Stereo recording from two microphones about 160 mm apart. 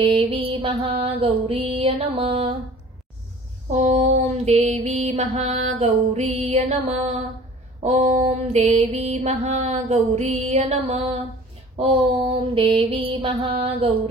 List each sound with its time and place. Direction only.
0.0 s mantra: 35° right (ahead or behind)
3.7 s mantra: 45° right (ahead or behind)